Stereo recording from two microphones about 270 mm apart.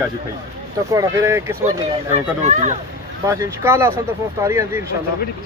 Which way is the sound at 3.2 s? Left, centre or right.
Centre.